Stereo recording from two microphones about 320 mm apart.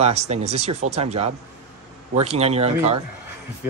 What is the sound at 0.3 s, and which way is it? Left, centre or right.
Speech, centre.